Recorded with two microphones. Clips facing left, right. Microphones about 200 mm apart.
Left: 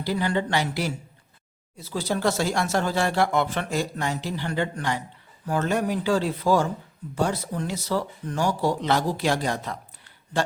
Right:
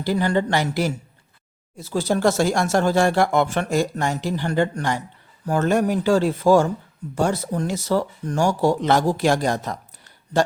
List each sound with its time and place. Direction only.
0.0 s speech: 45° right (ahead or behind)